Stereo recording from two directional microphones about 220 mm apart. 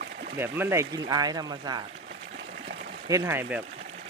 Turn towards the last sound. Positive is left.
turn(degrees=-10)  # may be behind; listen again after turning